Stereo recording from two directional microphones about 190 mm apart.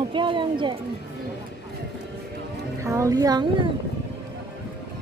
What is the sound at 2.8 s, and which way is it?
Speech, 15° right (ahead or behind).